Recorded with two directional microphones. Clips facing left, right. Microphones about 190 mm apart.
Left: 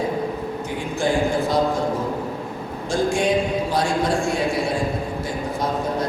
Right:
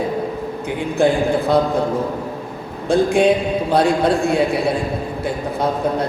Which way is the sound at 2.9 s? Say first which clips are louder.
Right 6 dB; 60° right (ahead or behind).